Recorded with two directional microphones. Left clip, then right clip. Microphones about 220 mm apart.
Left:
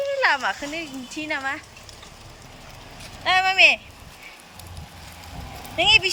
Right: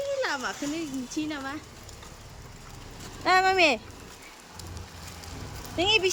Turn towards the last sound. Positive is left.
turn(degrees=-10)  # may be behind; listen again after turning